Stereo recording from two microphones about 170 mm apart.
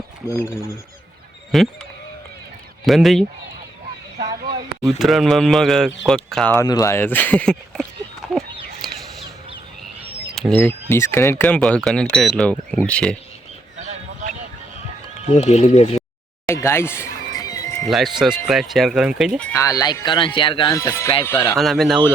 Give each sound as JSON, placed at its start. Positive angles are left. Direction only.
{"t": 1.5, "sound": "speech", "side_deg": 0}
{"t": 2.8, "sound": "speech", "side_deg": 0}
{"t": 4.8, "sound": "speech", "side_deg": 0}
{"t": 6.7, "sound": "speech", "side_deg": 20}
{"t": 8.8, "sound": "a sound", "side_deg": 0}
{"t": 10.3, "sound": "speech", "side_deg": 5}
{"t": 13.7, "sound": "a sound", "side_deg": -45}
{"t": 15.3, "sound": "speech", "side_deg": 40}
{"t": 16.5, "sound": "music", "side_deg": 15}
{"t": 17.8, "sound": "speech", "side_deg": 0}
{"t": 19.5, "sound": "speech", "side_deg": 20}
{"t": 20.7, "sound": "speech", "side_deg": 15}
{"t": 21.6, "sound": "speech", "side_deg": 0}